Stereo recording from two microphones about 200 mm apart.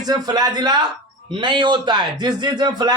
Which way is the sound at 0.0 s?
20° right (ahead or behind).